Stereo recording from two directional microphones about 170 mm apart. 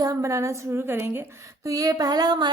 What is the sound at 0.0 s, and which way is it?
A woman's voice, 20° right (ahead or behind).